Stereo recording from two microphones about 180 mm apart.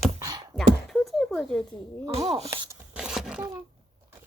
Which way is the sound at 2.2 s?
30° right (ahead or behind).